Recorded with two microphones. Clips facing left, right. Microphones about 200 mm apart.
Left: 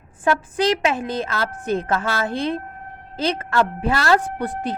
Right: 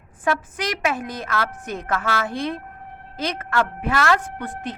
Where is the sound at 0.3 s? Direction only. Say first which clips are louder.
Left 5 dB; 30° left (ahead or behind).